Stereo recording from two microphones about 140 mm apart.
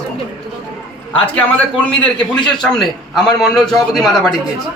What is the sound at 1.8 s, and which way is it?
A man's voice, 5° left (ahead or behind).